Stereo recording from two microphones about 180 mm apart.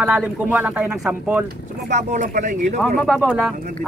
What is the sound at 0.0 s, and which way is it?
Speech, 5° right (ahead or behind).